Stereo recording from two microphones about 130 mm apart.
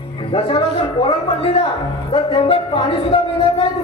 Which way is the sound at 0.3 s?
40° left (ahead or behind).